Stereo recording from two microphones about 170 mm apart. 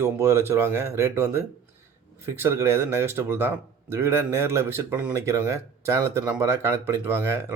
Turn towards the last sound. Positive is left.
turn(degrees=-15)  # may be behind; listen again after turning